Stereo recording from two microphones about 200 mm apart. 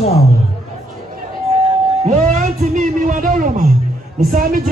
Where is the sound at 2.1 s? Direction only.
35° right (ahead or behind).